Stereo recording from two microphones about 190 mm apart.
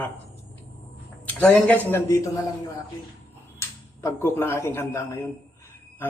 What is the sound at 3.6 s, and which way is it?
Speech, 15° left (ahead or behind).